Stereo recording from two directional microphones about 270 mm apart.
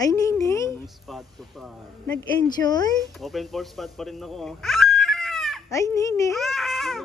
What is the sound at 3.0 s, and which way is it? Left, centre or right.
Speech, centre.